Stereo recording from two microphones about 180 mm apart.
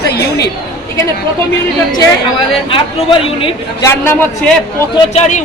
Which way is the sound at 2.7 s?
30° left (ahead or behind).